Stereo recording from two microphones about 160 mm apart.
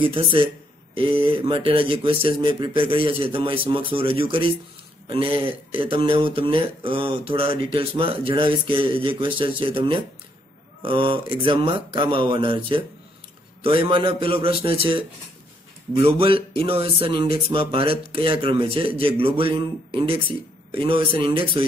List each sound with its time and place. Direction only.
0.0 s speech: 35° right (ahead or behind)
16.0 s speech: 35° right (ahead or behind)